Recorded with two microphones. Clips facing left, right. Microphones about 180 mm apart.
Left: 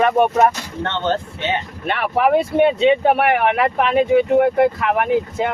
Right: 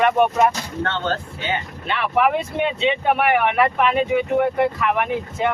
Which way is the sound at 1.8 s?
50° left (ahead or behind).